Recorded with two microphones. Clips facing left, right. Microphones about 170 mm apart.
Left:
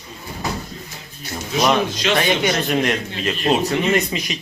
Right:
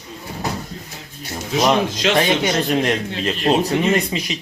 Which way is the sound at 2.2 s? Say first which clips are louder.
Right 1 dB; 30° right (ahead or behind).